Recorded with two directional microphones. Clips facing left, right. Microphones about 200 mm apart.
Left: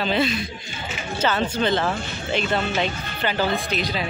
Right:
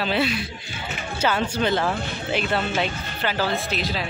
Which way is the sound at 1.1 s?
10° right (ahead or behind).